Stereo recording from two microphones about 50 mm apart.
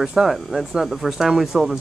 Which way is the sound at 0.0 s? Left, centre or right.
Centre.